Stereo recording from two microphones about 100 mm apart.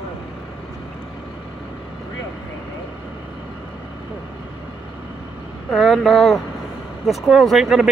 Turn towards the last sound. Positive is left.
turn(degrees=-5)  # may be behind; listen again after turning